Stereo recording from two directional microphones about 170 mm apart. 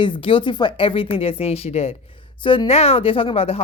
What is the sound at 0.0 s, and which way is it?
Speech, 30° left (ahead or behind).